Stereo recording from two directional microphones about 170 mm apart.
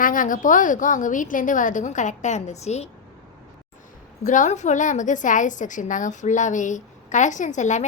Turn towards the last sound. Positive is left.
turn(degrees=45)  # may be behind; listen again after turning